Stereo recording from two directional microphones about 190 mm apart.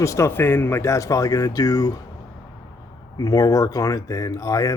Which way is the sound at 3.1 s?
20° left (ahead or behind).